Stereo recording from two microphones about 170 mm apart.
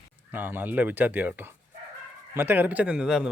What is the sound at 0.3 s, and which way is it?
Speech, 10° right (ahead or behind).